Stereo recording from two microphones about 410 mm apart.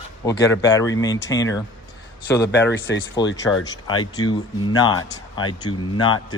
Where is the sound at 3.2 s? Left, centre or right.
Centre.